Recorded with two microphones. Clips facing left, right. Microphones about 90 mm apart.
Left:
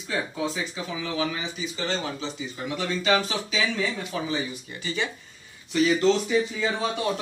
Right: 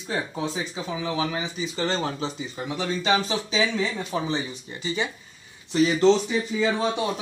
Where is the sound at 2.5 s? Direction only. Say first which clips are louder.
Left 2 dB; 25° right (ahead or behind).